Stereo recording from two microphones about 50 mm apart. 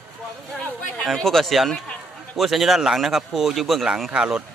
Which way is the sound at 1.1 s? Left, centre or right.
Centre.